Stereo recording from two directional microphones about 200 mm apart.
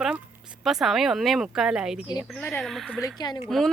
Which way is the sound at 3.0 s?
20° left (ahead or behind).